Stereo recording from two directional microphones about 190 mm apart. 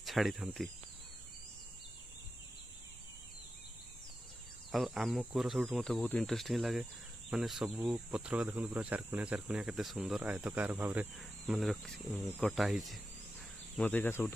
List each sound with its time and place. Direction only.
0.0 s speech: centre (ahead or behind)
4.6 s speech: centre (ahead or behind)
13.7 s speech: 10° left (ahead or behind)